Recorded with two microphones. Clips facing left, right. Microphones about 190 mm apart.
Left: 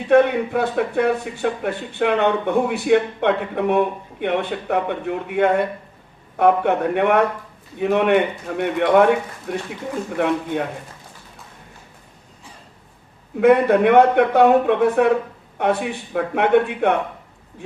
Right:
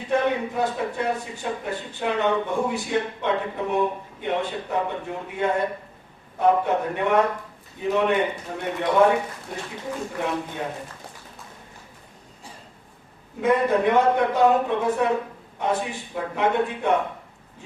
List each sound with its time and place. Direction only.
0.1 s a man's voice: 65° left (ahead or behind)
13.4 s a man's voice: 65° left (ahead or behind)